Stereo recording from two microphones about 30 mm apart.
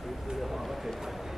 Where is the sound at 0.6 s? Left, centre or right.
Centre.